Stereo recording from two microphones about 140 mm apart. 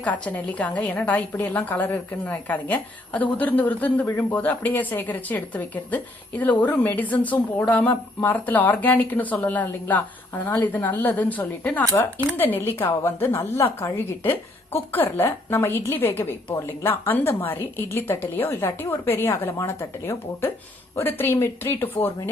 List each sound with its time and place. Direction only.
0.0 s a woman's voice: 10° left (ahead or behind)